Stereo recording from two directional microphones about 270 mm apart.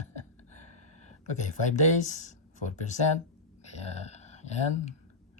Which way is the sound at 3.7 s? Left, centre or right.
Left.